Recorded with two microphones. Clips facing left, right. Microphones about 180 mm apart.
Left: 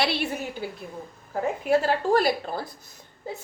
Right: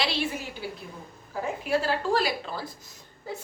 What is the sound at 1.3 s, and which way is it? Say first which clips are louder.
A woman's voice: left 4 dB; 50° left (ahead or behind).